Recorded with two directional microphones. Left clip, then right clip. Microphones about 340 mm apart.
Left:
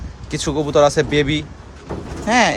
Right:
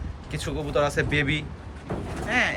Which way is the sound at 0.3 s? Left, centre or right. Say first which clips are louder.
Left 11 dB; centre.